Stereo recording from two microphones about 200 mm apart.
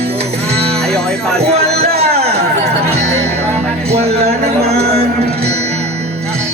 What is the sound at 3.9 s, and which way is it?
Speech, 30° right (ahead or behind).